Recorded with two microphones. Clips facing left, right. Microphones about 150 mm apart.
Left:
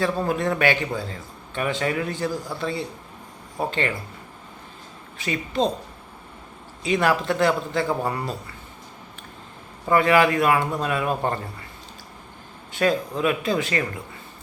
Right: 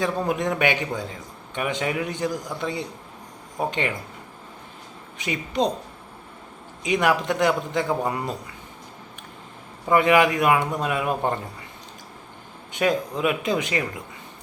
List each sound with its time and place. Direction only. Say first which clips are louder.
0.0 s a man's voice: left 1 dB; 15° right (ahead or behind)
5.1 s a man's voice: even; 15° right (ahead or behind)
6.8 s a man's voice: even; 15° right (ahead or behind)
9.9 s a man's voice: even; 15° right (ahead or behind)
12.7 s a man's voice: left 1 dB; 20° right (ahead or behind)